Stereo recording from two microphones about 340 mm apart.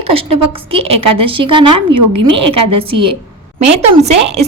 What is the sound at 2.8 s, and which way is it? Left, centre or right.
A woman's voice, centre.